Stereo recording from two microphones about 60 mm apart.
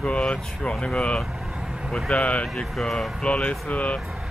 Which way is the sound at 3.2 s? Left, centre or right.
Centre.